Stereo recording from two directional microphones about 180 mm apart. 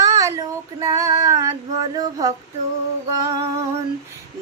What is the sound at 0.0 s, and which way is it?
Child singing, 20° right (ahead or behind).